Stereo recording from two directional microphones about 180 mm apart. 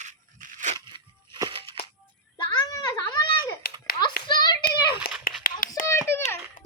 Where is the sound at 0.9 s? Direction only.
25° right (ahead or behind).